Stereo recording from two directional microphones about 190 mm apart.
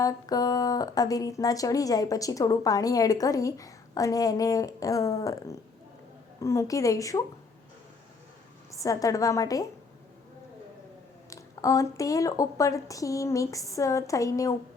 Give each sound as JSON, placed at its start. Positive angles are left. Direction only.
{"t": 0.0, "sound": "a woman's voice", "side_deg": 20}
{"t": 8.8, "sound": "a woman's voice", "side_deg": 15}
{"t": 11.3, "sound": "a woman's voice", "side_deg": 15}